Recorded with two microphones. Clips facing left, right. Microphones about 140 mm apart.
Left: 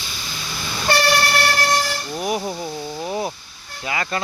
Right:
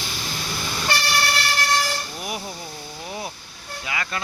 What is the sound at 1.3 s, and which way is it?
Siren, 55° left (ahead or behind).